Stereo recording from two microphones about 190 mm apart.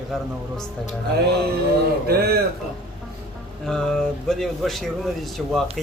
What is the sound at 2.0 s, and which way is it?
Speech, 55° right (ahead or behind).